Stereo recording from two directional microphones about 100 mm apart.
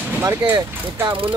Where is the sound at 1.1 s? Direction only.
60° right (ahead or behind).